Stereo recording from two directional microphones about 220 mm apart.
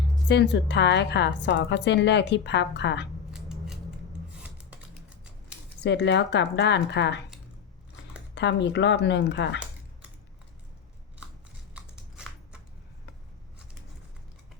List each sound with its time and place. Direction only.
0.3 s a woman's voice: 50° left (ahead or behind)
3.3 s scissors: centre (ahead or behind)
4.5 s typewriter: 5° right (ahead or behind)
5.8 s a woman's voice: 50° left (ahead or behind)
8.4 s a woman's voice: 55° left (ahead or behind)
11.7 s biting: 5° right (ahead or behind)